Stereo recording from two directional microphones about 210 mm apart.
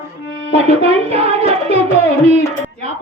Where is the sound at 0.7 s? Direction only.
30° right (ahead or behind).